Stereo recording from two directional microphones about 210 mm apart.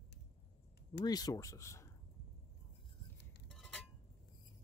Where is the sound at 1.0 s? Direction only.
20° left (ahead or behind).